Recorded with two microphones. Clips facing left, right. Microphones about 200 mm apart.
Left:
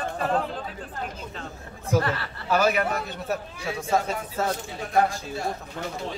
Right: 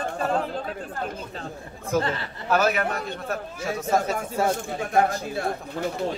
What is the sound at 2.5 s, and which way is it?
Speech, centre (ahead or behind).